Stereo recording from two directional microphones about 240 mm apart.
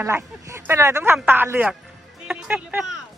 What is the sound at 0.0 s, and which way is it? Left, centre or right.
Speech, centre.